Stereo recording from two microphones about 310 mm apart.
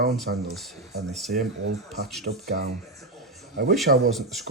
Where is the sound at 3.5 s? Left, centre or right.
Right.